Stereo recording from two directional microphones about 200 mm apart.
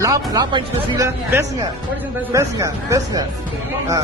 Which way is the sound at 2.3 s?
15° right (ahead or behind).